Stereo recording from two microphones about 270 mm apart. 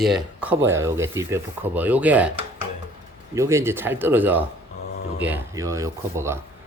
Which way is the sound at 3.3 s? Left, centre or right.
Centre.